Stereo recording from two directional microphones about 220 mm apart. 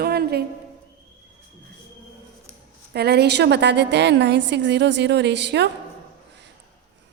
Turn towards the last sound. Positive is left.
turn(degrees=-50)  # may be behind; listen again after turning